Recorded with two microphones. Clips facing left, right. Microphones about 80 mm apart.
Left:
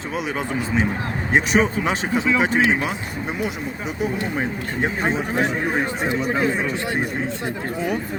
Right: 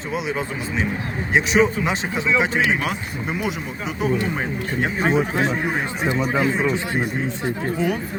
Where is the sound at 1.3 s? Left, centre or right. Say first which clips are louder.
Right 1 dB; left.